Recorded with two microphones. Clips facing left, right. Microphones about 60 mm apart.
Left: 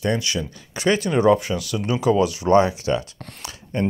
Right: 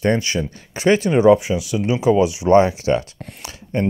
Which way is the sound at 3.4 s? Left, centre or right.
Right.